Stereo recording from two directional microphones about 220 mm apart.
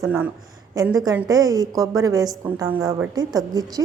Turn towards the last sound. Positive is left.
turn(degrees=-15)  # may be behind; listen again after turning